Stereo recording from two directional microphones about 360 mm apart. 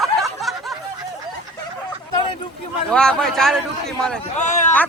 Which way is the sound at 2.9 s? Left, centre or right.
Centre.